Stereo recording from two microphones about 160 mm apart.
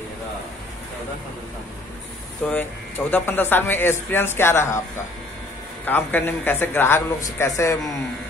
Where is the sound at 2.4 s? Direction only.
10° left (ahead or behind).